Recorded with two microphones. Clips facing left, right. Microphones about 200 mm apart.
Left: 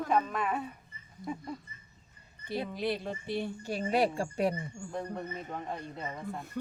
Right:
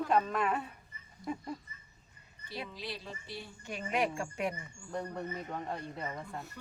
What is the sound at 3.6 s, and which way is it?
Speech, 35° left (ahead or behind).